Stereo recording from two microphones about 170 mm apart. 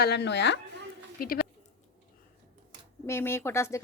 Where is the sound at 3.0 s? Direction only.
15° left (ahead or behind).